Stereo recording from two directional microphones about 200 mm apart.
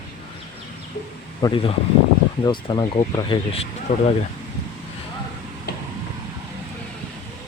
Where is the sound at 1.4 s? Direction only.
25° left (ahead or behind).